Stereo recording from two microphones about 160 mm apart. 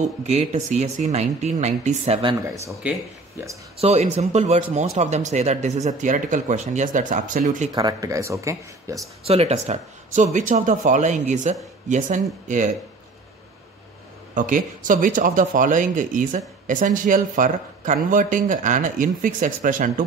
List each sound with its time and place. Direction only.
0.0 s speech: 45° right (ahead or behind)
2.8 s speech: 10° right (ahead or behind)
3.8 s speech: 45° right (ahead or behind)
7.7 s speech: 25° right (ahead or behind)
9.2 s speech: 40° right (ahead or behind)
14.3 s speech: 55° right (ahead or behind)